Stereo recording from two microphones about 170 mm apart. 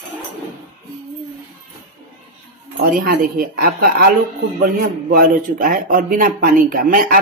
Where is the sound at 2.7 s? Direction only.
55° right (ahead or behind).